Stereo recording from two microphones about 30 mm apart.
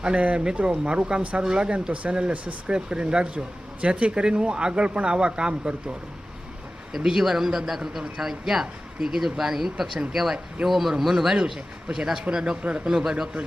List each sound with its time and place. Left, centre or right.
0.1 s speech: right
0.9 s a man's voice: right
1.9 s speech: right
2.7 s speech: right
6.9 s a man's voice: centre
12.3 s a man's voice: right